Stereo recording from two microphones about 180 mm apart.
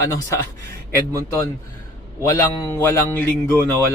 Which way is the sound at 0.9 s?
15° left (ahead or behind).